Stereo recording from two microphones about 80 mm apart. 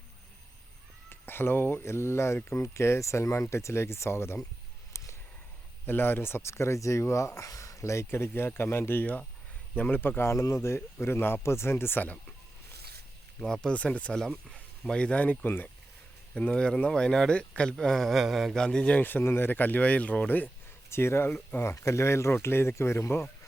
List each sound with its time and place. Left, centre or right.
1.1 s speech: left
4.9 s a sound: left
5.8 s speech: left
13.4 s speech: centre; by 15.7 s left
16.3 s speech: centre
18.5 s speech: centre
19.0 s speech: left
20.9 s speech: left